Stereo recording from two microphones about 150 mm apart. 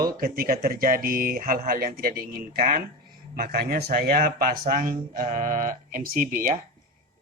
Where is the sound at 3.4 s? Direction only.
90° right.